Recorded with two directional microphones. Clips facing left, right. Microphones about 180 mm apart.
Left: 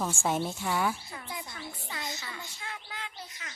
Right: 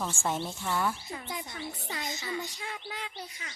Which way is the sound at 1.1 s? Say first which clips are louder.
Right 3 dB; 20° right (ahead or behind).